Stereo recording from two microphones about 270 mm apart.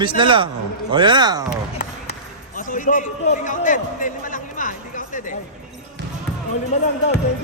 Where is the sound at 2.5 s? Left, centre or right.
Left.